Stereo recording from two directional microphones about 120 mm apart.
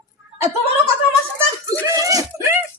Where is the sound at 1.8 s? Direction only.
30° right (ahead or behind).